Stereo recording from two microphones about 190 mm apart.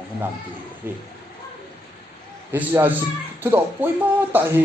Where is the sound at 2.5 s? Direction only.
10° right (ahead or behind).